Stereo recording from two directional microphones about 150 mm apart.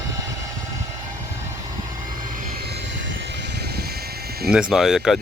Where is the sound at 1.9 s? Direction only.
65° right (ahead or behind); by 2.7 s 85° right.